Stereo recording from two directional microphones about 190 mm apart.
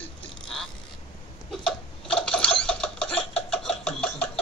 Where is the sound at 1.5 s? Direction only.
5° left (ahead or behind).